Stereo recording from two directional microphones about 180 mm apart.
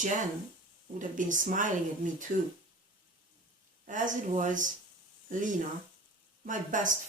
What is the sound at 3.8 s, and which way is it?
Speech, 45° right (ahead or behind).